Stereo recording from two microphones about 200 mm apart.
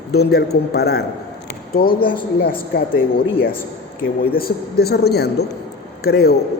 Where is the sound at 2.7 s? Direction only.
50° left (ahead or behind).